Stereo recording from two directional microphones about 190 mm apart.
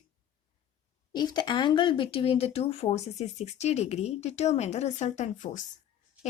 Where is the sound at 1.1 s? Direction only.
20° left (ahead or behind).